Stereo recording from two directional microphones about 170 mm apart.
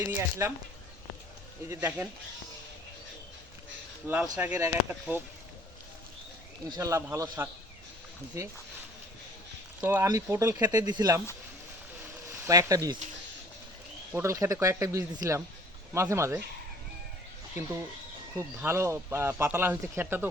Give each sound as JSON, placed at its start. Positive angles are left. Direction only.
{"t": 0.0, "sound": "speech", "side_deg": -15}
{"t": 1.7, "sound": "speech", "side_deg": -10}
{"t": 4.0, "sound": "speech", "side_deg": -10}
{"t": 6.7, "sound": "speech", "side_deg": -20}
{"t": 9.8, "sound": "speech", "side_deg": -15}
{"t": 12.3, "sound": "speech", "side_deg": -15}
{"t": 14.1, "sound": "speech", "side_deg": -15}
{"t": 18.3, "sound": "speech", "side_deg": -15}